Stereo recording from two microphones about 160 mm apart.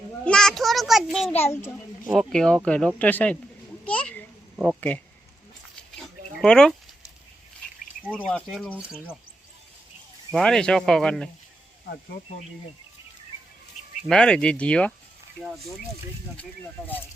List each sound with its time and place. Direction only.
0.3 s a child's voice: 5° left (ahead or behind)
1.4 s speech: 15° left (ahead or behind)
2.0 s a child's voice: centre (ahead or behind)
3.8 s a sound: 10° left (ahead or behind)
4.5 s speech: 5° right (ahead or behind)
6.0 s a sound: 5° left (ahead or behind)
8.1 s speech: 5° left (ahead or behind)
10.3 s a child's voice: 5° left (ahead or behind)
14.1 s a child's voice: 5° left (ahead or behind)
16.4 s speech: 10° left (ahead or behind)